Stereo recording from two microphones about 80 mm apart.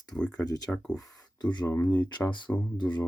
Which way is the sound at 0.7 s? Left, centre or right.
Centre.